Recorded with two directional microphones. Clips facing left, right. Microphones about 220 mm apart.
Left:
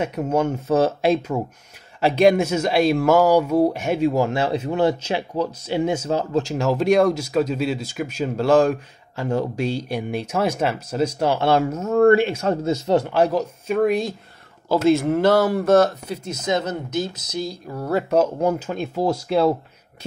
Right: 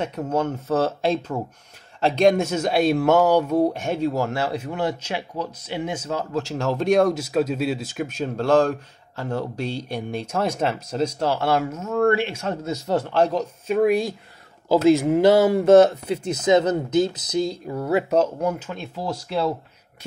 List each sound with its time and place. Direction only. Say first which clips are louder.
0.2 s speech: left 3 dB; 15° left (ahead or behind)
3.8 s speech: left 4 dB; 10° left (ahead or behind); by 6.4 s 30° left (ahead or behind)
6.4 s speech: left 3 dB; 10° left (ahead or behind)
11.1 s speech: left 4 dB; 20° left (ahead or behind); by 12.7 s 35° left (ahead or behind)
12.7 s speech: right 1 dB; 20° left (ahead or behind)
13.7 s speech: right 1 dB; 10° right (ahead or behind)
18.4 s speech: left 4 dB; 30° left (ahead or behind)
18.8 s speech: left 7 dB; 45° left (ahead or behind)